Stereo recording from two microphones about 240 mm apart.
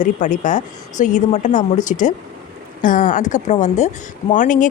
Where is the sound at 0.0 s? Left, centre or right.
Left.